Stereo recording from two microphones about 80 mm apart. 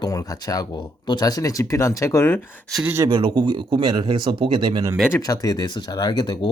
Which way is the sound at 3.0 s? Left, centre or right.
Right.